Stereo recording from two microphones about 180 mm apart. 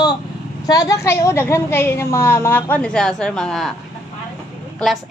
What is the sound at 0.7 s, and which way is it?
A woman's voice, 20° left (ahead or behind).